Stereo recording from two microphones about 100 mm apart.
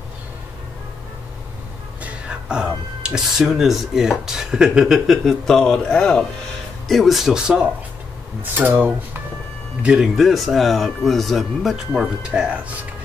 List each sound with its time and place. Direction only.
2.0 s speech: 10° right (ahead or behind)
8.4 s speech: 20° right (ahead or behind)
9.8 s speech: 5° right (ahead or behind)